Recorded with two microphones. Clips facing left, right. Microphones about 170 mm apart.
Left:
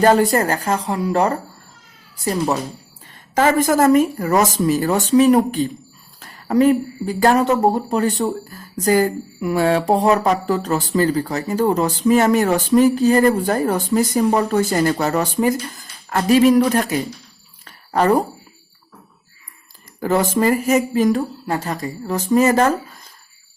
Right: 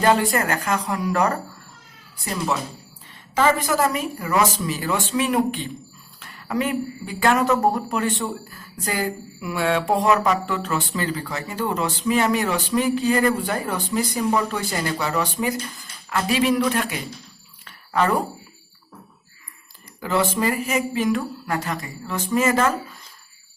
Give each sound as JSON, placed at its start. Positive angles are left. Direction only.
{"t": 0.0, "sound": "a woman's voice", "side_deg": 40}
{"t": 3.3, "sound": "a woman's voice", "side_deg": 45}
{"t": 17.7, "sound": "a sound", "side_deg": 40}
{"t": 20.0, "sound": "a woman's voice", "side_deg": 45}